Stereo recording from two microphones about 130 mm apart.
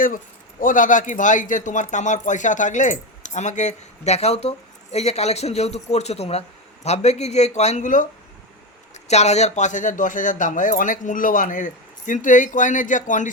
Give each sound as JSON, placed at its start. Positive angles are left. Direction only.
{"t": 0.6, "sound": "speech", "side_deg": 90}
{"t": 9.0, "sound": "speech", "side_deg": 60}